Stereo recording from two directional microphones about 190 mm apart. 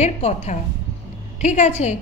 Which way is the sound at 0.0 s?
35° left (ahead or behind).